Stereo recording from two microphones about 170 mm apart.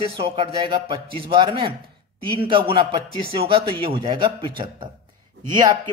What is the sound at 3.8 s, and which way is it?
A man's voice, 30° right (ahead or behind).